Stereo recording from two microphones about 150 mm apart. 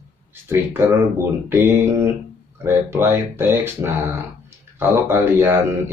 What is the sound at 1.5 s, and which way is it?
A man's voice, 15° right (ahead or behind).